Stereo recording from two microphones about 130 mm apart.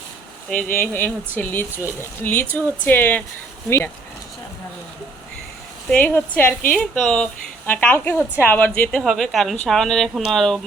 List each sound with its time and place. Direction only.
0.5 s a woman's voice: 10° left (ahead or behind)
1.7 s speech: 15° right (ahead or behind)
2.0 s a woman's voice: 15° left (ahead or behind)
5.9 s a woman's voice: 15° left (ahead or behind)
6.7 s speech: 5° left (ahead or behind)
7.7 s a woman's voice: 15° left (ahead or behind)